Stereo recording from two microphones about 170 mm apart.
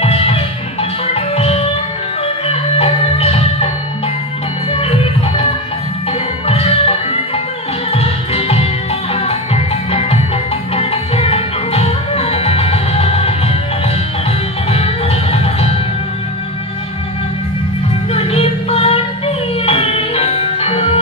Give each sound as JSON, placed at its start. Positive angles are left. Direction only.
{"t": 0.0, "sound": "music", "side_deg": 35}
{"t": 4.7, "sound": "music", "side_deg": 35}
{"t": 14.7, "sound": "music", "side_deg": 35}
{"t": 18.1, "sound": "music", "side_deg": 35}